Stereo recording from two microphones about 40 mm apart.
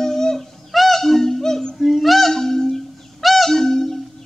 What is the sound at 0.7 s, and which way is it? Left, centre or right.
Music, centre.